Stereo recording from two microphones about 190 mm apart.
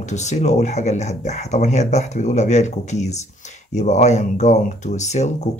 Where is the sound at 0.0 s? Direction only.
40° left (ahead or behind).